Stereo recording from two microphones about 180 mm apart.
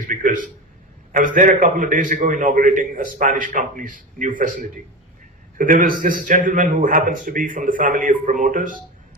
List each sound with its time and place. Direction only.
0.1 s a man's voice: 45° right (ahead or behind)